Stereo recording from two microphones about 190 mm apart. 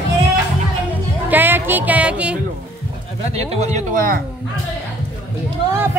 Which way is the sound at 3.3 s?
35° right (ahead or behind).